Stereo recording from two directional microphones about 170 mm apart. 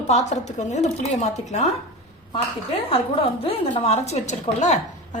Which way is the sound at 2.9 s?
35° left (ahead or behind).